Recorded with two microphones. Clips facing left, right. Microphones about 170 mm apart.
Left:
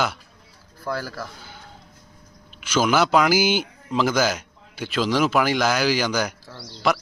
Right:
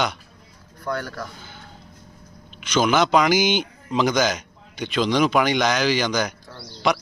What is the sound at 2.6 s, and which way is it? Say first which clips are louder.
A man's voice: right 1 dB; 5° left (ahead or behind).